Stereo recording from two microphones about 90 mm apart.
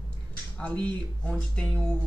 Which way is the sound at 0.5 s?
15° left (ahead or behind).